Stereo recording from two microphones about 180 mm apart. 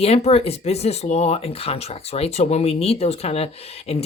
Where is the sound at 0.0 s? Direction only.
35° left (ahead or behind).